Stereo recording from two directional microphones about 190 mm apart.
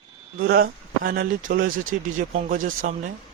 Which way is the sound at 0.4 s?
50° right (ahead or behind).